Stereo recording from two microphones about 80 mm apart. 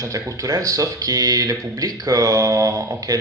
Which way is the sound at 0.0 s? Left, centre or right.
Right.